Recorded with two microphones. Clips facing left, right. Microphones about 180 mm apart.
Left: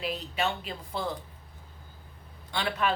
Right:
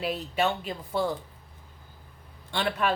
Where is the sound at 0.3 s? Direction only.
45° right (ahead or behind).